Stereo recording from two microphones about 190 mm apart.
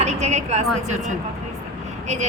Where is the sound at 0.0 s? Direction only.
35° right (ahead or behind).